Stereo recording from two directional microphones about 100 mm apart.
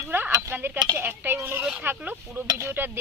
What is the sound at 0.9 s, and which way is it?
Speech, 20° right (ahead or behind).